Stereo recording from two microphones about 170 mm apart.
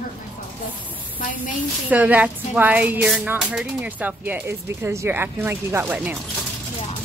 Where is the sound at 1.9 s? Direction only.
10° right (ahead or behind).